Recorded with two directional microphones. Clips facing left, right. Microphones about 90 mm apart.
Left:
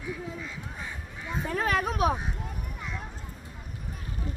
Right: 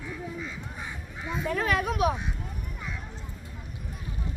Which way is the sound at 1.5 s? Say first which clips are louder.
Even; 40° left (ahead or behind).